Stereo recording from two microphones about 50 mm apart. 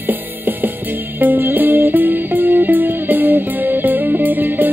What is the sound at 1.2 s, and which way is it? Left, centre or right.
Music, right.